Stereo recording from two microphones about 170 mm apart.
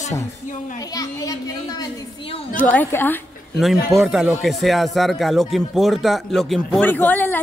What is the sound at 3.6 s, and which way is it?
Speech, centre (ahead or behind).